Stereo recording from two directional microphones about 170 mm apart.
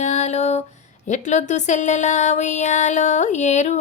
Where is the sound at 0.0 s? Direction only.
40° left (ahead or behind).